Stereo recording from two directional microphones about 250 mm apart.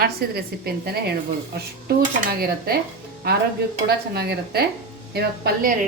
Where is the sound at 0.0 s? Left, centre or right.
Right.